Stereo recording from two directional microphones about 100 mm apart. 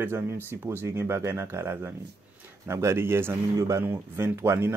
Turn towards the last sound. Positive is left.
turn(degrees=-25)  # may be behind; listen again after turning